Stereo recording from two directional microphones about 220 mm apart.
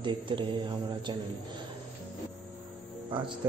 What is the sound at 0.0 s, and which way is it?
A man's voice, 20° right (ahead or behind).